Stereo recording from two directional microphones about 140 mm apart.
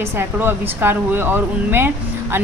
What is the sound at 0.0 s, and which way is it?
A woman's voice, 15° right (ahead or behind).